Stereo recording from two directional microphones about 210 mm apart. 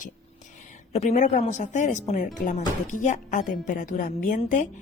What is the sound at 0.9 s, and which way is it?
A woman's voice, 35° left (ahead or behind).